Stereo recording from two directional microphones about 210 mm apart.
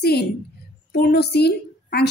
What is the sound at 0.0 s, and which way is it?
A woman's voice, 50° left (ahead or behind).